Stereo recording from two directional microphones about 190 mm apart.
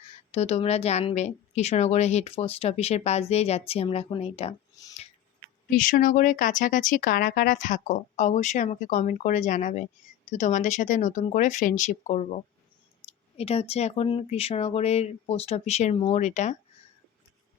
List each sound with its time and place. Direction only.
0.3 s speech: 35° left (ahead or behind)
4.8 s a sound: 20° left (ahead or behind)
5.6 s speech: 45° left (ahead or behind)